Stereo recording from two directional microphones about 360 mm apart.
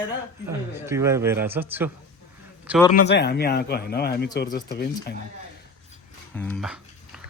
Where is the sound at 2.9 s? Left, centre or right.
Left.